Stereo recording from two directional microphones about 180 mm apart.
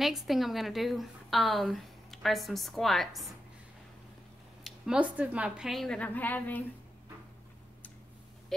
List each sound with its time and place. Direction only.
0.0 s a woman's voice: centre (ahead or behind)
4.6 s a woman's voice: 5° right (ahead or behind)